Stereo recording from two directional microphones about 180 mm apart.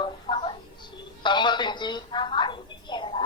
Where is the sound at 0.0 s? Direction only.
25° left (ahead or behind).